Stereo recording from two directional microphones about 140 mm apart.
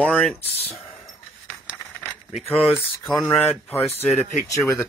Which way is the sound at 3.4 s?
15° left (ahead or behind).